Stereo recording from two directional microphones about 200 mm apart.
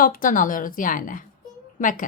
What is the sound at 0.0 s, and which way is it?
A woman's voice, 40° left (ahead or behind).